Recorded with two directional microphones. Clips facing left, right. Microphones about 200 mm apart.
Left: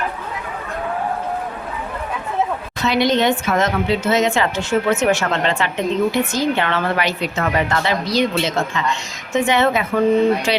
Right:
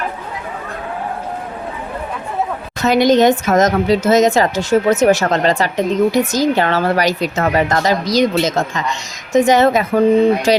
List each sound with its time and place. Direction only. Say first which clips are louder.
2.8 s speech: right 6 dB; 45° right (ahead or behind)